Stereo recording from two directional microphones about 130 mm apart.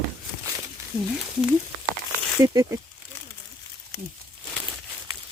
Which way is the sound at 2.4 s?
25° right (ahead or behind).